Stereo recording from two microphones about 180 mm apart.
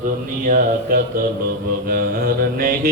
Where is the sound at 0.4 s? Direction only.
50° right (ahead or behind).